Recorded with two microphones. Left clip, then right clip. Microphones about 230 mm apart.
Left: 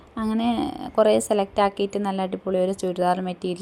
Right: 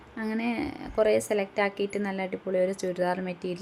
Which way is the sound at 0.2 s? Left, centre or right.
Centre.